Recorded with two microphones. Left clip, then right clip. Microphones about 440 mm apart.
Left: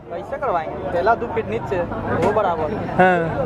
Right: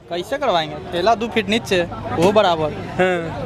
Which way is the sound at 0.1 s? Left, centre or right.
Right.